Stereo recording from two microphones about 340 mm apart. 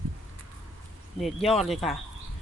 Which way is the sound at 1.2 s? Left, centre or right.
Centre.